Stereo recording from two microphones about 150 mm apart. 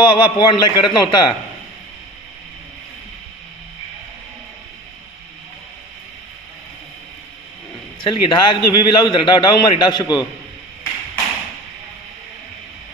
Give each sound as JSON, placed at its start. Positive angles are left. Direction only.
{"t": 0.0, "sound": "a man's voice", "side_deg": 30}
{"t": 8.0, "sound": "a man's voice", "side_deg": 30}